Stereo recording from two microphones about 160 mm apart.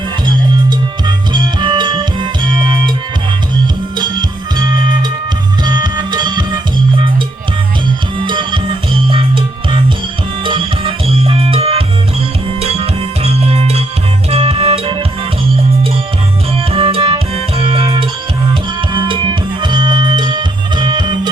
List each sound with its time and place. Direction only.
0.7 s music: 30° right (ahead or behind)
3.9 s music: 30° right (ahead or behind)
5.6 s music: 25° right (ahead or behind)
8.2 s music: 30° right (ahead or behind)
16.6 s music: 35° right (ahead or behind)